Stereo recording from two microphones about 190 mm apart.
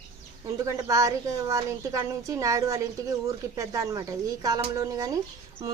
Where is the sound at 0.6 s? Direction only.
15° right (ahead or behind).